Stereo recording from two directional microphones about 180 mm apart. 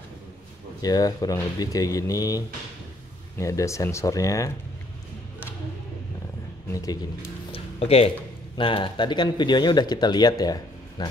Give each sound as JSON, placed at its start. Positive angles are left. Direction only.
{"t": 0.8, "sound": "speech", "side_deg": 20}
{"t": 6.7, "sound": "a man's voice", "side_deg": 20}
{"t": 7.5, "sound": "music", "side_deg": 35}
{"t": 8.5, "sound": "speech", "side_deg": 30}